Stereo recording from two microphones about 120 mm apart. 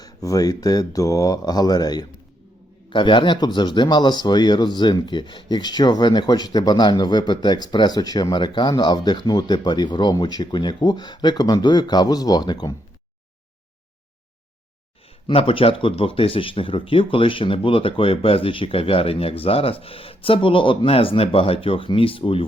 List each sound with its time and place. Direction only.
0.0 s speech: 30° left (ahead or behind)
15.3 s speech: 50° left (ahead or behind)